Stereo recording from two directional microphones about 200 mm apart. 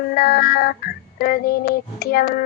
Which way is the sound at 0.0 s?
50° left (ahead or behind).